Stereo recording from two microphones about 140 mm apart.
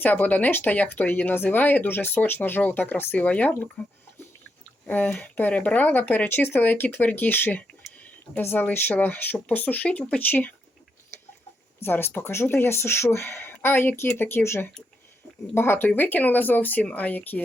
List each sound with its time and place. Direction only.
0.0 s speech: 10° left (ahead or behind)
4.9 s speech: 10° left (ahead or behind)
11.8 s speech: 15° left (ahead or behind)